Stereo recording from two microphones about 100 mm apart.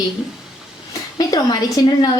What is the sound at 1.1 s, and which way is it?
Speech, 40° left (ahead or behind).